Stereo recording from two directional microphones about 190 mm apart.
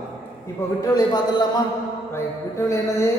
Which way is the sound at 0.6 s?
15° left (ahead or behind).